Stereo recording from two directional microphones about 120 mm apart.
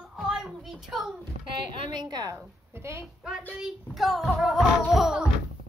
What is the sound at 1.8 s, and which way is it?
Speech, 35° right (ahead or behind).